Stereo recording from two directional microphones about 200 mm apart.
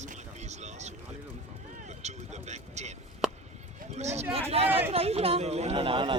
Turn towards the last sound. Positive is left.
turn(degrees=-25)  # may be behind; listen again after turning